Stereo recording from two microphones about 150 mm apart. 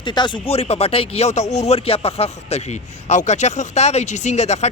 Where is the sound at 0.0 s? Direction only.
30° left (ahead or behind).